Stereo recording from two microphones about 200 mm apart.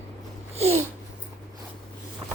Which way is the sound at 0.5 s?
30° right (ahead or behind).